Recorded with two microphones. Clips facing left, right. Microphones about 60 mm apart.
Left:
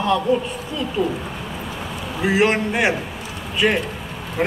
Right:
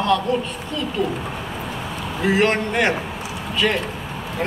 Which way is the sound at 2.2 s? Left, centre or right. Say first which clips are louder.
Left 1 dB; centre.